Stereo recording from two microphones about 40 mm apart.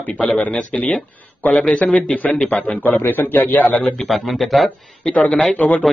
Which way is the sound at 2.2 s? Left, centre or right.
Left.